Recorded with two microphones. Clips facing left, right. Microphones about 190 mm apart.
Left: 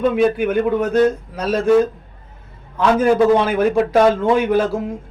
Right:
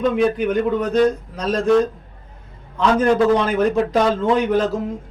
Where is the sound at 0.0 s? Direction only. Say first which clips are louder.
Left 2 dB; 5° left (ahead or behind).